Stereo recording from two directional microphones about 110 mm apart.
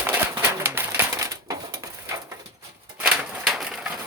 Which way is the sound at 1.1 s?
30° right (ahead or behind).